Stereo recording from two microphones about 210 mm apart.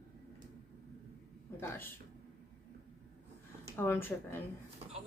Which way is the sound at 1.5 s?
10° left (ahead or behind).